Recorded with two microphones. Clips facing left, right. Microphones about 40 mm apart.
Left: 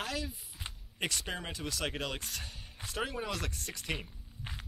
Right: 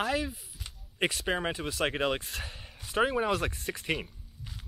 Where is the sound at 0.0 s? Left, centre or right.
Right.